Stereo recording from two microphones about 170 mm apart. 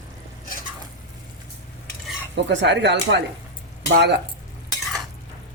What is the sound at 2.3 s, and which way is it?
Speech, 90° right.